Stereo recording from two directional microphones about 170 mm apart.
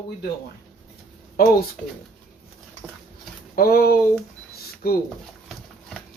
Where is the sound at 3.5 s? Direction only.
60° left (ahead or behind).